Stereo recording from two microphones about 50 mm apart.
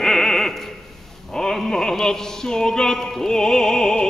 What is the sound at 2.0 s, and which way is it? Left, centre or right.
Music, centre.